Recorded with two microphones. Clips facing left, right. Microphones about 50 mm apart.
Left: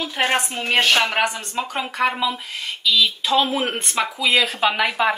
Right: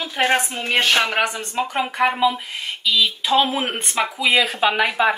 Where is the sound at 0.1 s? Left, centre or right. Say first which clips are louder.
Right 3 dB; centre.